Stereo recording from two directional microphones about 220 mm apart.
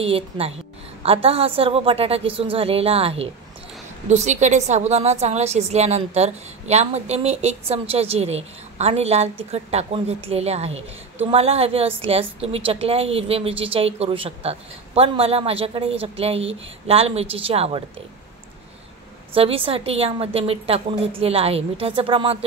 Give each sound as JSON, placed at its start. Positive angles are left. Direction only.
{"t": 0.0, "sound": "a woman's voice", "side_deg": -25}
{"t": 19.3, "sound": "a woman's voice", "side_deg": -25}